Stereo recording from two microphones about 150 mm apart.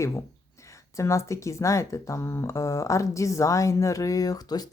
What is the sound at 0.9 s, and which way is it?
Speech, 20° left (ahead or behind).